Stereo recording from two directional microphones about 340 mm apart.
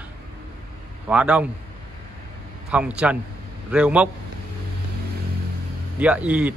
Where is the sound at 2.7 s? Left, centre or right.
Centre.